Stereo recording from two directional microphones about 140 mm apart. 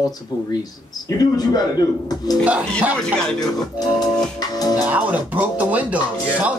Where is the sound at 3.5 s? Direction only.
25° left (ahead or behind).